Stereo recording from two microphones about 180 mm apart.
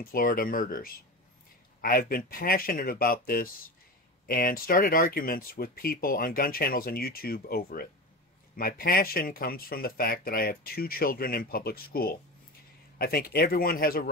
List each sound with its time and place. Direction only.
0.0 s speech: 55° left (ahead or behind)